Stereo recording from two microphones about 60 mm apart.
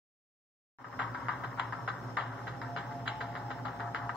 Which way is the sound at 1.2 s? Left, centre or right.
Centre.